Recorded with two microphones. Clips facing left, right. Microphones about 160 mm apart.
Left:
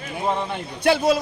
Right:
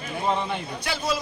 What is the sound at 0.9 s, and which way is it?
Speech, 60° left (ahead or behind).